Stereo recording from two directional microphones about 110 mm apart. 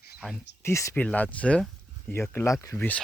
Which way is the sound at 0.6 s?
25° left (ahead or behind).